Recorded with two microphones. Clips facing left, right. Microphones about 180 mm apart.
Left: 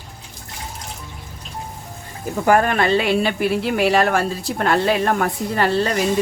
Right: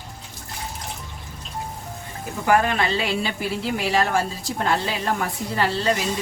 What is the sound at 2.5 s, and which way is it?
Speech, 50° left (ahead or behind).